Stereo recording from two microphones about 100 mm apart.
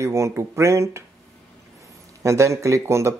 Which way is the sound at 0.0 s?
30° right (ahead or behind).